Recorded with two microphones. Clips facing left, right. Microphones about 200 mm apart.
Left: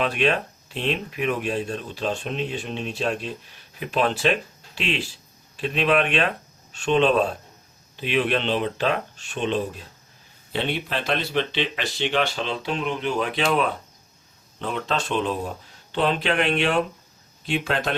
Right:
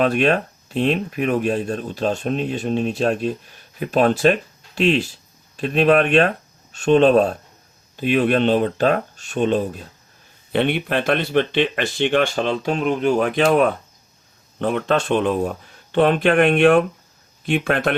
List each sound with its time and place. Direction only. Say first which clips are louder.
0.0 s speech: right 5 dB; 45° right (ahead or behind)
10.5 s speech: right 7 dB; 60° right (ahead or behind)